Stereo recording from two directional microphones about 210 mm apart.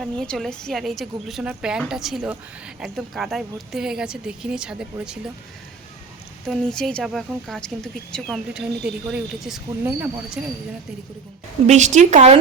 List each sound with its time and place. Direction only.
0.0 s a woman's voice: centre (ahead or behind)
6.5 s a woman's voice: centre (ahead or behind)
11.6 s speech: 35° right (ahead or behind)